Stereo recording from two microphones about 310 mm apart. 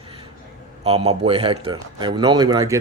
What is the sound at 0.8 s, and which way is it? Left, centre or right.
Speech, centre.